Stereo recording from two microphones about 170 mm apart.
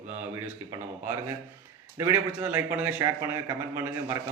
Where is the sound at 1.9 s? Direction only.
15° right (ahead or behind).